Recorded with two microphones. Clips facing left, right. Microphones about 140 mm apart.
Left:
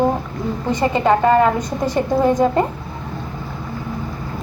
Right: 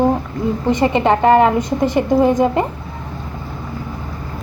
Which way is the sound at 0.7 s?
20° right (ahead or behind).